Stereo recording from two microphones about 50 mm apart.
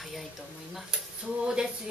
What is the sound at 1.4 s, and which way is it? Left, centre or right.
Speech, centre.